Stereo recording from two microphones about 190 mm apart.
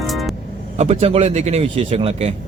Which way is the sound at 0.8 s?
30° right (ahead or behind).